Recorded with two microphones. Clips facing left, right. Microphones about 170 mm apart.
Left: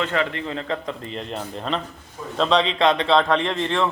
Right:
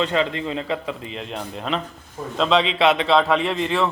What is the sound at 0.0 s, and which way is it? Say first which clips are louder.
A man's voice: right 2 dB; 20° right (ahead or behind).